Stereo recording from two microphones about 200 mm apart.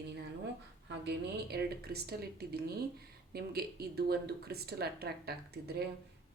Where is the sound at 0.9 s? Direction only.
55° right (ahead or behind).